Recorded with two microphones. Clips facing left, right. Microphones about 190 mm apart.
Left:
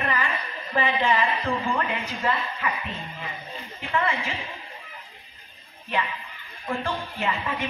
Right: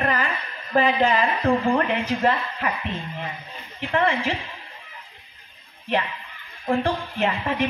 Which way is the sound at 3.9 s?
40° right (ahead or behind).